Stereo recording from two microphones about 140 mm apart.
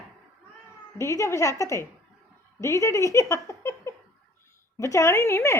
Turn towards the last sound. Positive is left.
turn(degrees=20)  # may be behind; listen again after turning